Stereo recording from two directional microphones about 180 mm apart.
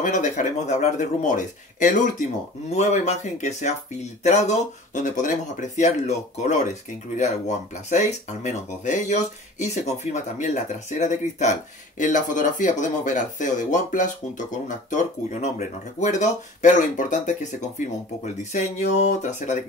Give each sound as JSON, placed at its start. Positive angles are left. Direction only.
{"t": 0.0, "sound": "speech", "side_deg": 45}
{"t": 16.0, "sound": "speech", "side_deg": 45}